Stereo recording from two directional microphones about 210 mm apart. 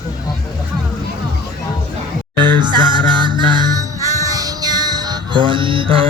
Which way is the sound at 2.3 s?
20° right (ahead or behind).